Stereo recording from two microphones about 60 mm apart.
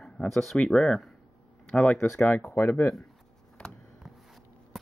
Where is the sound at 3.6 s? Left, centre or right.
Centre.